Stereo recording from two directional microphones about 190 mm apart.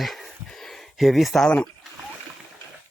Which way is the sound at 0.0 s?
Centre (ahead or behind).